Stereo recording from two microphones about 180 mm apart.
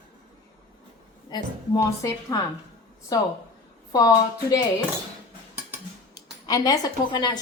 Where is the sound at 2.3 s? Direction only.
20° left (ahead or behind).